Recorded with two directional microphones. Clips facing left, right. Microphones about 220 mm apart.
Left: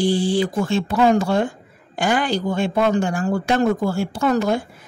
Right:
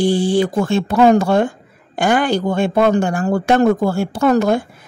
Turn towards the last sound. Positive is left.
turn(degrees=-55)  # may be behind; listen again after turning